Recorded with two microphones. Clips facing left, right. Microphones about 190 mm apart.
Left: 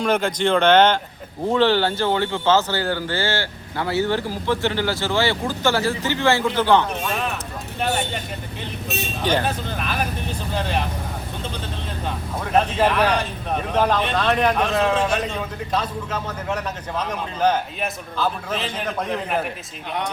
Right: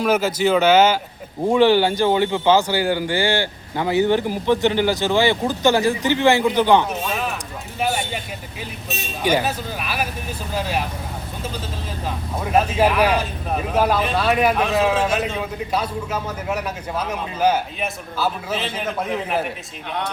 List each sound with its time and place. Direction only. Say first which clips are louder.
0.0 s speech: right 2 dB; 5° right (ahead or behind)
7.1 s a sound: even; 5° right (ahead or behind)
7.8 s speech: right 1 dB; 5° right (ahead or behind)
12.0 s speech: right 2 dB; 5° right (ahead or behind)